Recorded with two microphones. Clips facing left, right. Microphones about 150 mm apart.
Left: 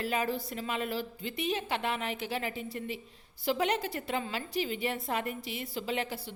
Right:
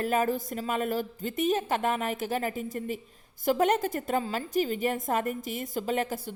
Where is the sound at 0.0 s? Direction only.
45° right (ahead or behind).